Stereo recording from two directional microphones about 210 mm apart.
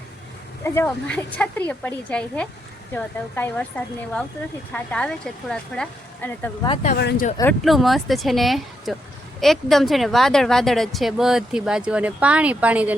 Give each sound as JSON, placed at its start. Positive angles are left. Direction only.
{"t": 0.6, "sound": "a woman's voice", "side_deg": 10}
{"t": 6.9, "sound": "speech", "side_deg": 50}
{"t": 7.6, "sound": "speech", "side_deg": 0}